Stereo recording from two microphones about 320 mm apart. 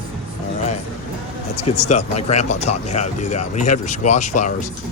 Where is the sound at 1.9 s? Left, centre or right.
Left.